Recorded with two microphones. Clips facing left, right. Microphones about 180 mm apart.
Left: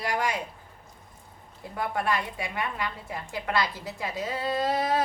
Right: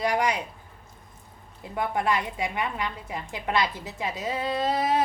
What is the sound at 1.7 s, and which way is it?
A woman's voice, 20° right (ahead or behind).